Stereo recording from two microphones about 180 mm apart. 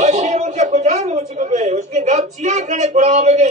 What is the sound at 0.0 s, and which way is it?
A woman's voice, 40° right (ahead or behind).